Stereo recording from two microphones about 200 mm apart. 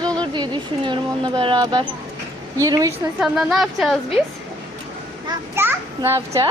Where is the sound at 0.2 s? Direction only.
20° right (ahead or behind).